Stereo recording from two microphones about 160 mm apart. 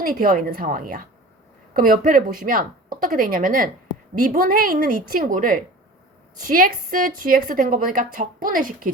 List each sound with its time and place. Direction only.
0.0 s a woman's voice: 65° right (ahead or behind)